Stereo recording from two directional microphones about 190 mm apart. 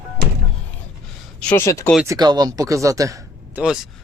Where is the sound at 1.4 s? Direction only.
10° left (ahead or behind).